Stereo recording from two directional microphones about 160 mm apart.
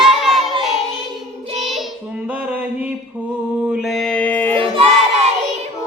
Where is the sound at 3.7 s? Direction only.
Centre (ahead or behind).